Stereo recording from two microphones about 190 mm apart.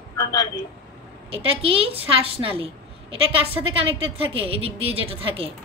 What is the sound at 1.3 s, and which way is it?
A woman's voice, 30° right (ahead or behind).